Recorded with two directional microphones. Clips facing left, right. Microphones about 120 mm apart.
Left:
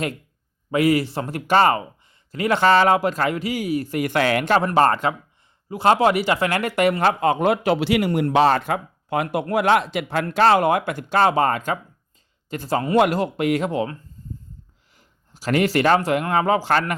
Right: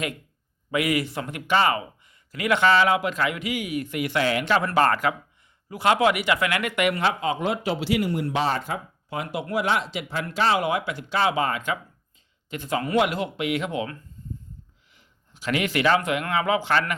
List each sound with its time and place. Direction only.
0.7 s a man's voice: 30° left (ahead or behind)
4.6 s a man's voice: 30° left (ahead or behind)
7.0 s a man's voice: 50° left (ahead or behind); by 13.9 s 35° left (ahead or behind)
14.9 s speech: 40° left (ahead or behind)